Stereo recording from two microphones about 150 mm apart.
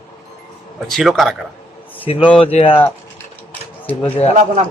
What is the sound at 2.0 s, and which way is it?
Speech, 35° left (ahead or behind).